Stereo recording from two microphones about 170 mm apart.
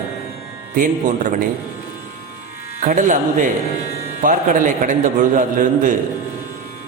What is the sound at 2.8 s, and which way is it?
A man's voice, 50° right (ahead or behind).